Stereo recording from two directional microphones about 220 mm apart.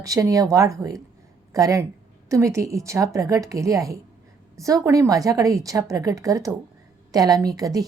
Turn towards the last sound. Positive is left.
turn(degrees=-15)  # may be behind; listen again after turning